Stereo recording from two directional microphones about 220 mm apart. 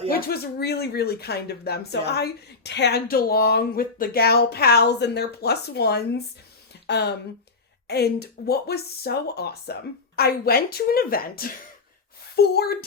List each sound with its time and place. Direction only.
0.3 s speech: 45° left (ahead or behind)